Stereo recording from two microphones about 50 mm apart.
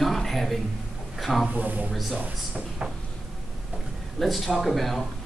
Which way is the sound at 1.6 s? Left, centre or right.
Right.